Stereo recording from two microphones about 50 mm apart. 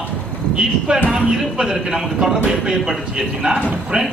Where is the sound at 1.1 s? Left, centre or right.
Centre.